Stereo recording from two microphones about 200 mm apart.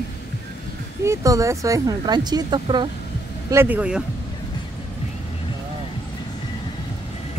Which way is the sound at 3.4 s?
10° right (ahead or behind).